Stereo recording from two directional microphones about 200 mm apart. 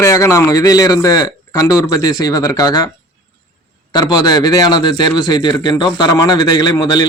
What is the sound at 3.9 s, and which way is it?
A man's voice, 20° left (ahead or behind).